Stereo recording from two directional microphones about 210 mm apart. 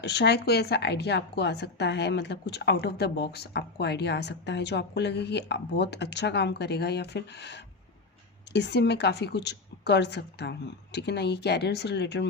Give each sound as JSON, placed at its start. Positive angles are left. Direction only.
{"t": 0.0, "sound": "a woman's voice", "side_deg": 55}